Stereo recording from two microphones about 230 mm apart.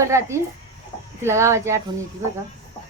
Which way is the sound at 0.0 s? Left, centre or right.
Centre.